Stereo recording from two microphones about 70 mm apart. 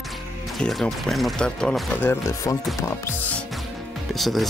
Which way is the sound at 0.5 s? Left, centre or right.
Centre.